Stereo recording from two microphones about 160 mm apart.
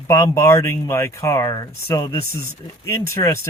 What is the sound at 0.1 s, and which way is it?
Speech, 20° left (ahead or behind).